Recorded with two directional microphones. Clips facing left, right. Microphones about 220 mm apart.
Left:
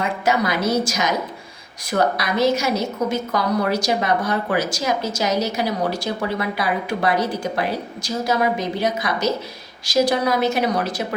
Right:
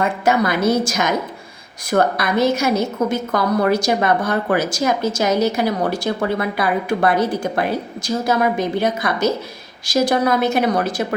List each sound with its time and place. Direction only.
0.0 s a woman's voice: 50° right (ahead or behind)